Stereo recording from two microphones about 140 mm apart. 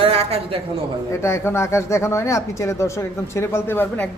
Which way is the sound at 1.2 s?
20° left (ahead or behind).